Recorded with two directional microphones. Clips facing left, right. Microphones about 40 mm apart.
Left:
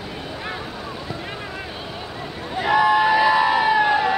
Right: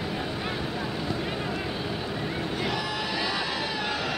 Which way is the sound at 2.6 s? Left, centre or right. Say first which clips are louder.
Left 18 dB; left.